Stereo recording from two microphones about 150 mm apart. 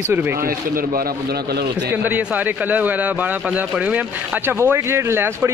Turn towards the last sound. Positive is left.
turn(degrees=-15)  # may be behind; listen again after turning